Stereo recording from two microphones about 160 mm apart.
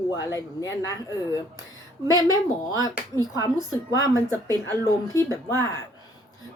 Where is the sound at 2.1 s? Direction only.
25° right (ahead or behind).